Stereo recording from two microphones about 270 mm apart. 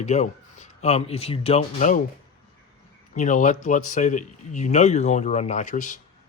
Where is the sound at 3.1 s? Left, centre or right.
Left.